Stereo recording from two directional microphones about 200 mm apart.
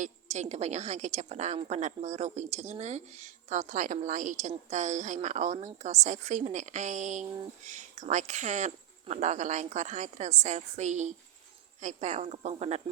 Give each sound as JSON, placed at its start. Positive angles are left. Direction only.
{"t": 0.0, "sound": "a woman's voice", "side_deg": -35}